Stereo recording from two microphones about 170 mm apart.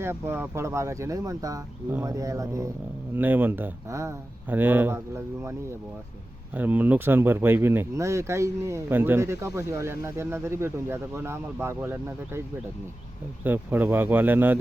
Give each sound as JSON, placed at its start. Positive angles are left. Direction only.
{"t": 0.0, "sound": "speech", "side_deg": -15}
{"t": 13.4, "sound": "speech", "side_deg": -10}